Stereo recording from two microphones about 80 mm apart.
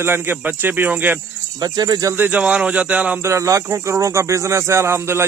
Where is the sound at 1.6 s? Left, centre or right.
Right.